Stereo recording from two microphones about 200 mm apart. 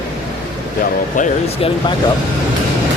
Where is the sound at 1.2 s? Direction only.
40° left (ahead or behind).